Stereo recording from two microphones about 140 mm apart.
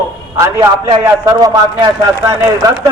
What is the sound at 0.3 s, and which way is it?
A man's voice, 25° right (ahead or behind).